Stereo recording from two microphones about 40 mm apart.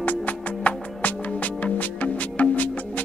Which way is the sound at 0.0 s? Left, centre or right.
Left.